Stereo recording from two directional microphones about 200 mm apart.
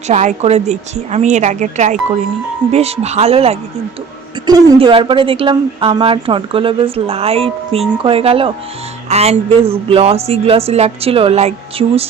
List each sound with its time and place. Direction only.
0.1 s speech: 35° right (ahead or behind)
4.4 s speech: 20° right (ahead or behind)